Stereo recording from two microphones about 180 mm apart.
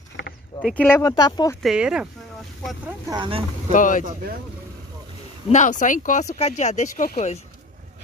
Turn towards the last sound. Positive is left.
turn(degrees=45)  # may be behind; listen again after turning